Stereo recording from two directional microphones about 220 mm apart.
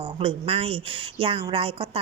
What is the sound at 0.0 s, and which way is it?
A woman's voice, 25° right (ahead or behind).